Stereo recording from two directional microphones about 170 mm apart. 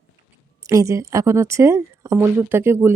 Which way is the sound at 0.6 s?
20° right (ahead or behind).